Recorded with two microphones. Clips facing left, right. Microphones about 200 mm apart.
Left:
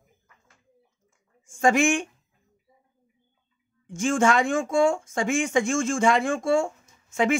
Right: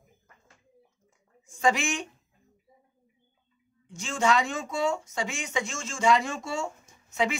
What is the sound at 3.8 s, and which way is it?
A man's voice, 50° left (ahead or behind).